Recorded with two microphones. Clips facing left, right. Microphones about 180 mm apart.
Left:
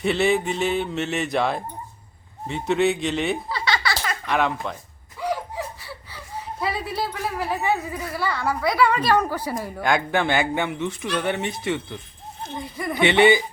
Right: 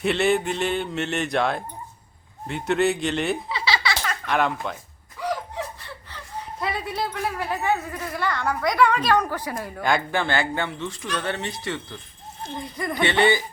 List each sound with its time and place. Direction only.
0.0 s speech: centre (ahead or behind)
5.2 s snicker: 10° left (ahead or behind)
9.6 s speech: centre (ahead or behind)
10.1 s speech: 15° left (ahead or behind)